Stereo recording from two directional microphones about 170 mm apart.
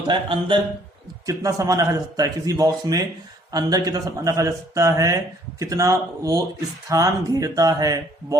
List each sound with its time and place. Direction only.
0.1 s speech: 30° right (ahead or behind)
1.3 s speech: 20° right (ahead or behind)